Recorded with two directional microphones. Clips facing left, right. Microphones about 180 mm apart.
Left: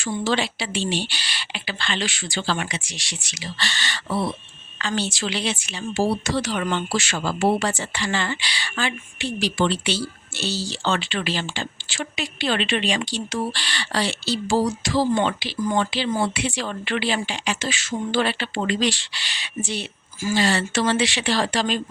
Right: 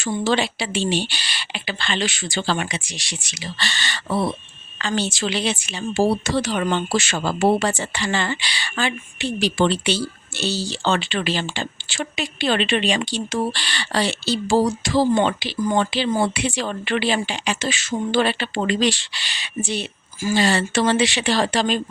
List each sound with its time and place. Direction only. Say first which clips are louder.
0.0 s speech: right 3 dB; 20° right (ahead or behind)